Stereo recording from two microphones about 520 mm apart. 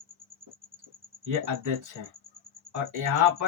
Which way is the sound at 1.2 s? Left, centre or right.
Right.